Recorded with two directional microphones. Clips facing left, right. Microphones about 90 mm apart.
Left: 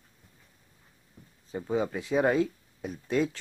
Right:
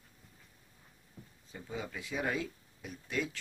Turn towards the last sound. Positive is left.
turn(degrees=35)  # may be behind; listen again after turning